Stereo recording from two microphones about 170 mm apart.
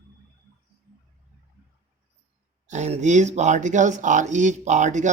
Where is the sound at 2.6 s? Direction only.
45° right (ahead or behind).